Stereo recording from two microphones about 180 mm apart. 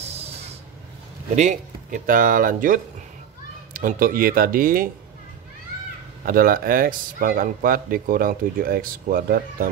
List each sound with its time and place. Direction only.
1.3 s speech: 40° right (ahead or behind)
6.2 s speech: 50° right (ahead or behind)